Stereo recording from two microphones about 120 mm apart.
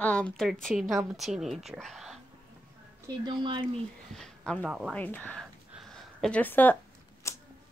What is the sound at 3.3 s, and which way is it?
Speech, 40° right (ahead or behind).